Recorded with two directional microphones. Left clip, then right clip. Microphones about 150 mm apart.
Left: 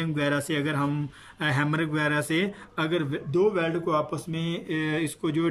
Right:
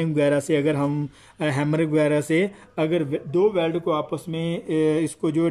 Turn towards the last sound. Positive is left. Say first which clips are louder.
# right 5 dB
turn(degrees=-30)  # may be behind; listen again after turning